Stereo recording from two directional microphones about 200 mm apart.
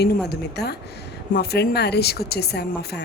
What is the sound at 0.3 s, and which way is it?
A woman's voice, 55° left (ahead or behind).